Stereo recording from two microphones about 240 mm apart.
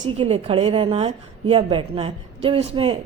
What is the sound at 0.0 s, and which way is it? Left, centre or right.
A woman's voice, right.